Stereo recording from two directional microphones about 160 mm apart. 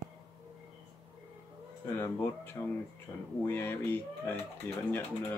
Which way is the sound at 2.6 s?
20° left (ahead or behind).